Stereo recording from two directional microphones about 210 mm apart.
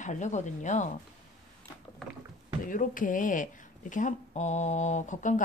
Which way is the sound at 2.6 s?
40° left (ahead or behind).